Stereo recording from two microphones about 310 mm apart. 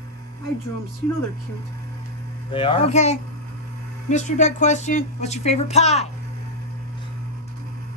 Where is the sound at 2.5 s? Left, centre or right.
Centre.